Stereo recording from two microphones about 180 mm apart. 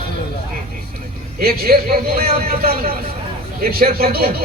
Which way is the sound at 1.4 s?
55° right (ahead or behind).